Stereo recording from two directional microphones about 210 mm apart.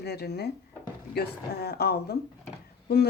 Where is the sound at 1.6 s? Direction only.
50° left (ahead or behind).